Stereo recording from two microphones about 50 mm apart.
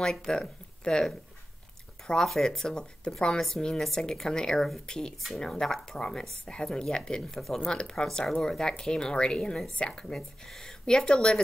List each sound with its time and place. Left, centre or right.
0.0 s speech: centre
2.0 s speech: centre
4.8 s speech: centre